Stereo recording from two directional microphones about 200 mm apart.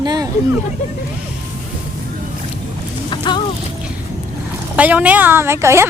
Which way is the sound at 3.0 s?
25° left (ahead or behind).